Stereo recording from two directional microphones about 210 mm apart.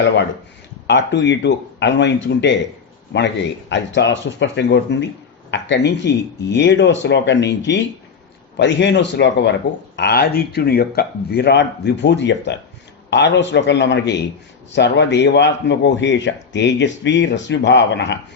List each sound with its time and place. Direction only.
0.9 s speech: 60° left (ahead or behind)